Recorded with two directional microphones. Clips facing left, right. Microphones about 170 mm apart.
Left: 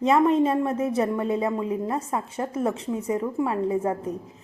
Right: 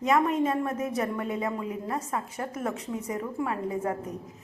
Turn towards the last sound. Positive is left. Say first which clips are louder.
# left 5 dB
turn(degrees=30)  # may be behind; listen again after turning